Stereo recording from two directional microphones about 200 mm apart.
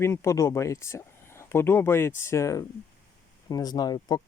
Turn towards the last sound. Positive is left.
turn(degrees=20)  # may be behind; listen again after turning